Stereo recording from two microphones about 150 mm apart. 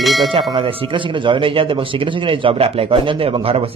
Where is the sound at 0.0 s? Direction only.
Centre (ahead or behind).